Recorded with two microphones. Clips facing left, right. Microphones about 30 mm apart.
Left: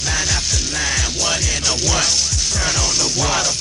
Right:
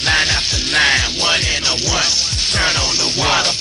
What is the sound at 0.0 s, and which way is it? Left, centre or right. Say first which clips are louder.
Music: right 6 dB; right.